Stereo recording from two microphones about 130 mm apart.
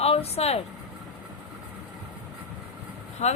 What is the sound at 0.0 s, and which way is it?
Speech, 50° left (ahead or behind).